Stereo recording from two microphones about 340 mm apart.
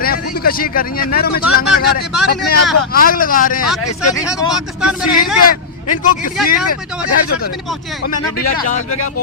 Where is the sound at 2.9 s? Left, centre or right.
Left.